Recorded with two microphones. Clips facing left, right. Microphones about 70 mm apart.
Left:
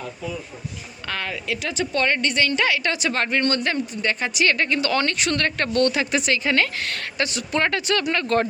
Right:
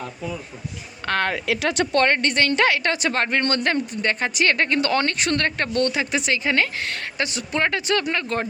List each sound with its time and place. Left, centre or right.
1.0 s a woman's voice: right
2.0 s a woman's voice: right
5.5 s speech: right
8.2 s speech: centre